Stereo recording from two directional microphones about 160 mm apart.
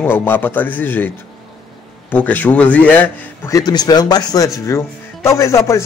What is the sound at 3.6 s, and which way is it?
Speech, 25° left (ahead or behind).